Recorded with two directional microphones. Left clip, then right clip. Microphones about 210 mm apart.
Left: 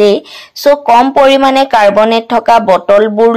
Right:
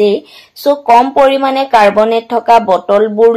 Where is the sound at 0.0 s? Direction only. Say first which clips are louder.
Left 3 dB; 25° left (ahead or behind).